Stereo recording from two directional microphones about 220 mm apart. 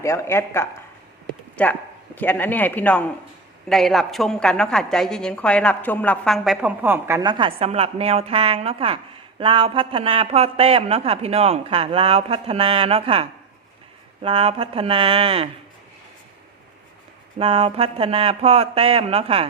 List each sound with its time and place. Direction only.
0.0 s a man's voice: 10° left (ahead or behind); by 15.4 s 25° right (ahead or behind)
17.3 s speech: 25° right (ahead or behind)